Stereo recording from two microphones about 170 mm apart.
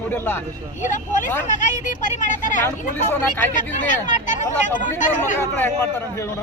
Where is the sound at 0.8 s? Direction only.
50° left (ahead or behind).